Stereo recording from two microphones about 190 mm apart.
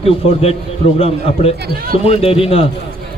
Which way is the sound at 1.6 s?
50° right (ahead or behind).